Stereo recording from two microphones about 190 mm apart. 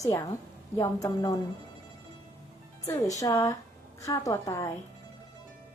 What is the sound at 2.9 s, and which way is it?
A woman's voice, 15° left (ahead or behind).